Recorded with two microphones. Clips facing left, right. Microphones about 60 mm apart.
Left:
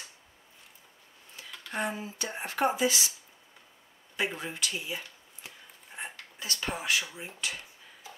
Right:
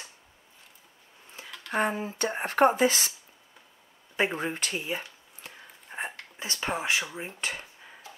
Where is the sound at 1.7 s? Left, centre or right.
Right.